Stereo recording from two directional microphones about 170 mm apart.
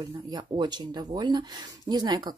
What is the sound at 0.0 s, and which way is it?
Speech, 25° right (ahead or behind).